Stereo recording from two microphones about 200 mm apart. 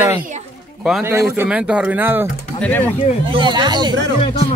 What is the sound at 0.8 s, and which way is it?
Speech, 5° right (ahead or behind).